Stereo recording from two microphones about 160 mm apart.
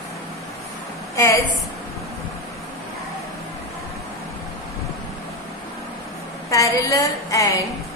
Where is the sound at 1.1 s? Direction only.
20° left (ahead or behind).